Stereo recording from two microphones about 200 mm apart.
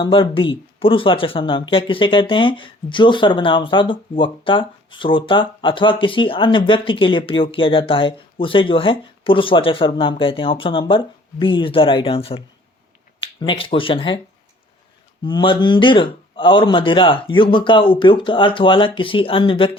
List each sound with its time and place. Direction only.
0.0 s speech: 25° left (ahead or behind)
13.4 s speech: 25° left (ahead or behind)
15.2 s speech: 25° left (ahead or behind)